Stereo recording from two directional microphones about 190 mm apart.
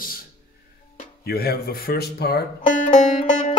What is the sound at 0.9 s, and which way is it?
Speech, 55° left (ahead or behind).